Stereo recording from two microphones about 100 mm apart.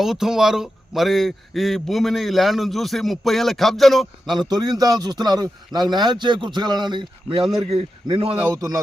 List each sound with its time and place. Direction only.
0.0 s a man's voice: 5° right (ahead or behind)
4.3 s a man's voice: 45° right (ahead or behind)
7.7 s a man's voice: 70° right (ahead or behind)
8.5 s speech: 35° right (ahead or behind)